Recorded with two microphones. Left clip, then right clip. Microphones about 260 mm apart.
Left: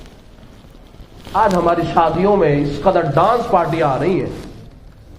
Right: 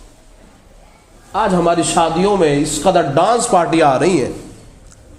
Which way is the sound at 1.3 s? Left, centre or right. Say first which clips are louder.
Even; right.